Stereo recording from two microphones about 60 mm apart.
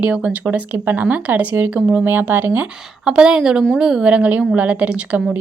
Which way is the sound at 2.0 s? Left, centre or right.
Right.